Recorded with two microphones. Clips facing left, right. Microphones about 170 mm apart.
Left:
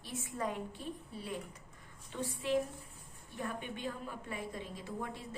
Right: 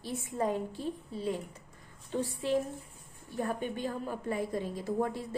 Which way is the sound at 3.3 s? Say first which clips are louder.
Right 7 dB; 40° right (ahead or behind).